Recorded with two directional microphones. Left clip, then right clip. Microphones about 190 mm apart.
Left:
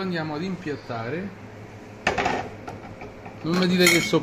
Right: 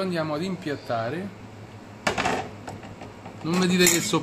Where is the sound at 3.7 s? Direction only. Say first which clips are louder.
Left 3 dB; centre (ahead or behind).